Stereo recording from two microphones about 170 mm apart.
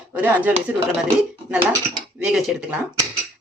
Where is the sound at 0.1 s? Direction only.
10° right (ahead or behind).